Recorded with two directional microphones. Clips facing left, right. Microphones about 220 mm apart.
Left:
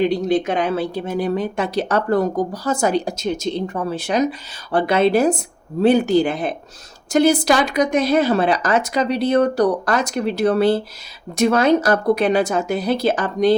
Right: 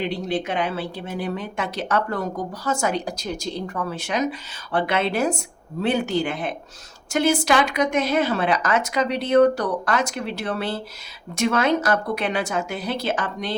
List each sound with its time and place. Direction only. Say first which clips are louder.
0.0 s speech: left 8 dB; 40° left (ahead or behind)